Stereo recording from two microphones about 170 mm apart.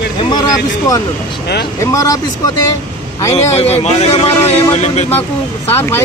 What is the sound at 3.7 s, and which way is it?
Speech, 40° left (ahead or behind).